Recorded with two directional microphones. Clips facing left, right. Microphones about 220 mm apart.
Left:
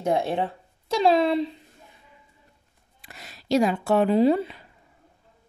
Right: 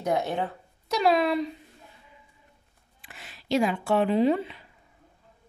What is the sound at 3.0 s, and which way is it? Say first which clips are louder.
Speech: left 3 dB; 40° left (ahead or behind).